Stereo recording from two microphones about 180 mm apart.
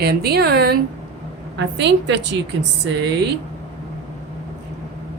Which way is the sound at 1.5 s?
75° right (ahead or behind).